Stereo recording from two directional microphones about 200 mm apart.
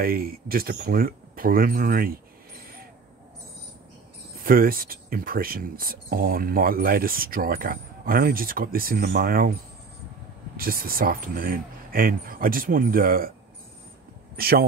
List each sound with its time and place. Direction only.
0.0 s speech: 50° right (ahead or behind)
4.4 s speech: 45° right (ahead or behind)
10.6 s speech: 45° right (ahead or behind)
14.3 s speech: 50° right (ahead or behind)